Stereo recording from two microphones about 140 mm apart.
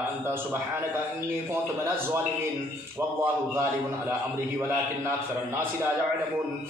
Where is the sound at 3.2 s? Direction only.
15° right (ahead or behind).